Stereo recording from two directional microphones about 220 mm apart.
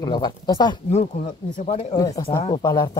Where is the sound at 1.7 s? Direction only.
30° left (ahead or behind).